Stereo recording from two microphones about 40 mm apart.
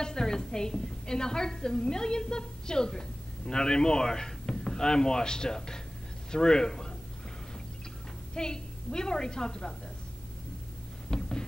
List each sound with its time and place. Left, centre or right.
0.0 s a woman's voice: centre
8.4 s a woman's voice: centre
11.1 s a sound: centre